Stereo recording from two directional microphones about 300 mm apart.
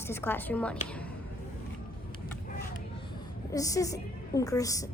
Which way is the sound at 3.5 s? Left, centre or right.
Centre.